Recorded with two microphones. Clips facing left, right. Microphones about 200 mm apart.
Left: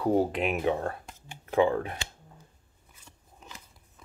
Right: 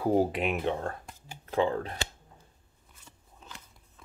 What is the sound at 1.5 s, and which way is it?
Speech, 10° left (ahead or behind).